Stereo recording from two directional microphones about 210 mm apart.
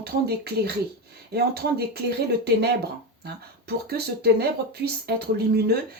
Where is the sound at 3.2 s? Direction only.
50° right (ahead or behind).